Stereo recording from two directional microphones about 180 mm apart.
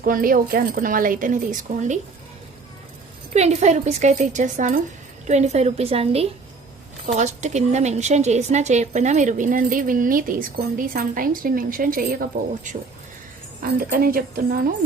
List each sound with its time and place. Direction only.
0.0 s a woman's voice: 50° right (ahead or behind)
3.3 s a woman's voice: 40° right (ahead or behind)
13.6 s a woman's voice: 55° right (ahead or behind)